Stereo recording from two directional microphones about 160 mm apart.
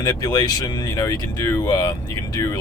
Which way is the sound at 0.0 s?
20° left (ahead or behind).